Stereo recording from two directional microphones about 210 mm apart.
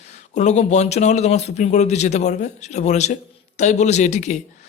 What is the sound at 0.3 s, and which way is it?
Speech, 35° left (ahead or behind).